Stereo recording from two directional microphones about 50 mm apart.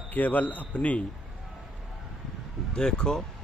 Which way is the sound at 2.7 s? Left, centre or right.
Centre.